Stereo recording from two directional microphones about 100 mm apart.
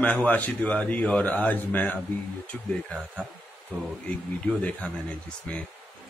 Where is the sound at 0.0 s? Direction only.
15° left (ahead or behind).